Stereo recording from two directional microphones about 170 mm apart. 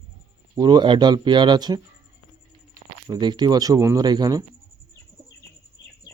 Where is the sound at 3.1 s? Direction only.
25° right (ahead or behind).